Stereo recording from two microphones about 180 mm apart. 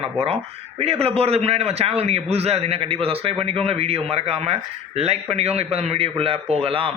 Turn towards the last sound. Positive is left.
turn(degrees=-30)  # may be behind; listen again after turning